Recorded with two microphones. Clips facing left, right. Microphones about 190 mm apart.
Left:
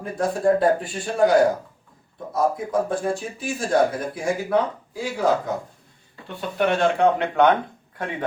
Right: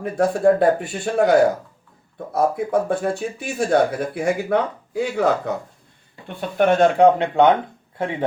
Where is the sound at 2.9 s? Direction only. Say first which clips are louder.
Right 3 dB; 65° right (ahead or behind).